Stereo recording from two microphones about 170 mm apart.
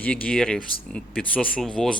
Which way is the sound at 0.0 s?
5° left (ahead or behind).